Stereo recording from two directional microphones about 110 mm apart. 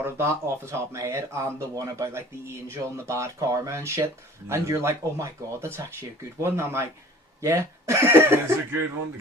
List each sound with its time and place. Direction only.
0.0 s speech: 25° right (ahead or behind)